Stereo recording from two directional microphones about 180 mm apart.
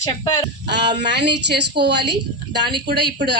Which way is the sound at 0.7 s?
70° right (ahead or behind).